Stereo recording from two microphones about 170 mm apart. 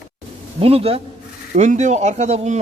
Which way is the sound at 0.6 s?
35° right (ahead or behind).